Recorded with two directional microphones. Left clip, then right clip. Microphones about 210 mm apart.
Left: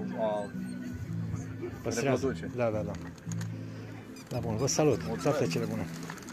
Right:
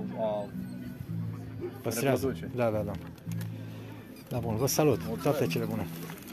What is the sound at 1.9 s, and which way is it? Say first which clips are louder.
Speech: right 1 dB; 20° right (ahead or behind).